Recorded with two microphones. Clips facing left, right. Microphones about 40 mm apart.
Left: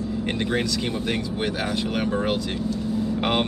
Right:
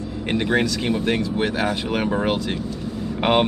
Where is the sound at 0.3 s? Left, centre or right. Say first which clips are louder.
Right 6 dB; centre.